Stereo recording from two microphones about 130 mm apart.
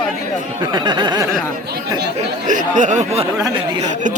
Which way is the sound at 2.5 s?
75° right (ahead or behind).